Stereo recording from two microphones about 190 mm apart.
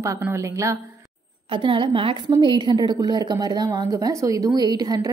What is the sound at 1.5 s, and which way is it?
A woman's voice, 25° right (ahead or behind).